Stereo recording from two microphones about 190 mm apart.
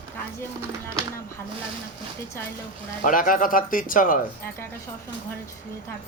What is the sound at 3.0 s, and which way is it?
A man's voice, 45° left (ahead or behind).